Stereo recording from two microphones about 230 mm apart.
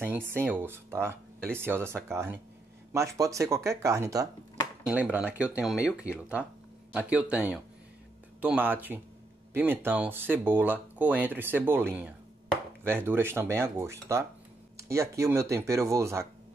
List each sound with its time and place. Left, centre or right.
0.0 s speech: centre